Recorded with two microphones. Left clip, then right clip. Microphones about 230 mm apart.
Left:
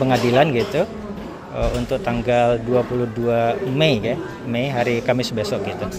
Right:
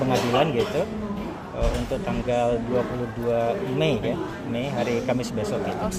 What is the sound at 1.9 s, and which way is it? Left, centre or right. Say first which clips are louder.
Speech: left 6 dB; left.